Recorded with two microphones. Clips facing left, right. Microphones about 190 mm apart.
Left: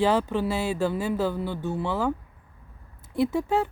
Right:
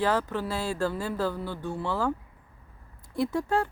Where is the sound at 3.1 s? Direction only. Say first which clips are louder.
Left 3 dB; 25° left (ahead or behind).